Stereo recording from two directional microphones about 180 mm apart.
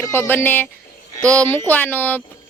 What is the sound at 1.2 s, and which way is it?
Speech, 20° right (ahead or behind).